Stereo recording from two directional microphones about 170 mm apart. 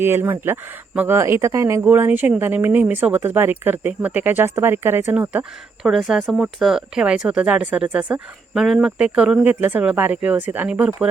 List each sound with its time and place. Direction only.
0.0 s speech: 15° right (ahead or behind)